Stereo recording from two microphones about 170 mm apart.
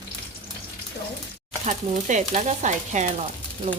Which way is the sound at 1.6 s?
45° right (ahead or behind).